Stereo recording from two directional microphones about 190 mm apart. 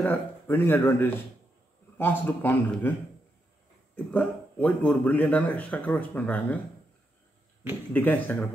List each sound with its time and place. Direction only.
0.0 s speech: 10° left (ahead or behind)
3.9 s speech: 5° left (ahead or behind)
7.9 s speech: 10° left (ahead or behind)